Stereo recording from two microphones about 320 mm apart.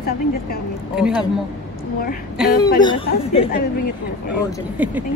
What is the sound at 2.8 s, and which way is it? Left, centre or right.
Speech, centre.